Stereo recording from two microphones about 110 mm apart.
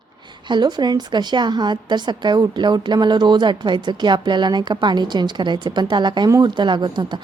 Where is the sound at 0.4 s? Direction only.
40° right (ahead or behind).